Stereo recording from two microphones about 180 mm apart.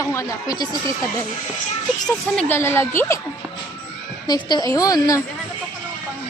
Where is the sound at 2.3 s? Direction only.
5° left (ahead or behind).